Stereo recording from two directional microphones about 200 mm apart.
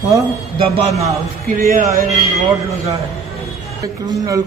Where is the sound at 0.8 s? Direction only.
35° right (ahead or behind).